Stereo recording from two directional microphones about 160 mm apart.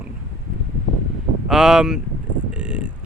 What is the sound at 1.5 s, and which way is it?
Speech, 5° right (ahead or behind).